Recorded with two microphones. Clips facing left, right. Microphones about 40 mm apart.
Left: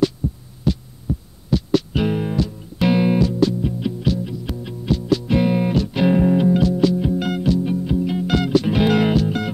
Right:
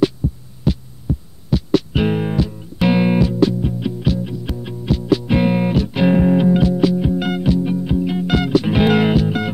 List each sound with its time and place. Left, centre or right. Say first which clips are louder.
0.7 s heart sounds: right 1 dB; centre
1.5 s music: right 2 dB; centre
2.0 s music: right 2 dB; right
2.3 s music: right 2 dB; right
3.8 s music: right 1 dB; centre
4.5 s music: right 1 dB; centre
5.2 s music: right 2 dB; right
6.8 s music: right 1 dB; right
8.6 s music: right 2 dB; right